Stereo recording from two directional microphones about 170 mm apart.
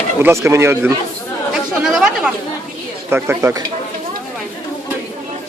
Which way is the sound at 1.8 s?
5° right (ahead or behind).